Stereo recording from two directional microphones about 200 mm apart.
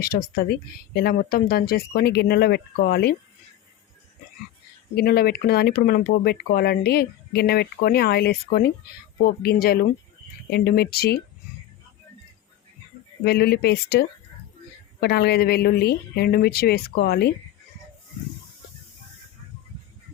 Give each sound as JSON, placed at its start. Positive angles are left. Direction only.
{"t": 0.0, "sound": "speech", "side_deg": 50}
{"t": 4.9, "sound": "speech", "side_deg": 50}
{"t": 13.2, "sound": "speech", "side_deg": 55}